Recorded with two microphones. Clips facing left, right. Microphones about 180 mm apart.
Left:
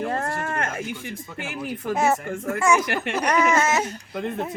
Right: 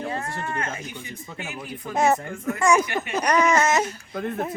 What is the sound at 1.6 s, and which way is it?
A child's voice, 5° left (ahead or behind).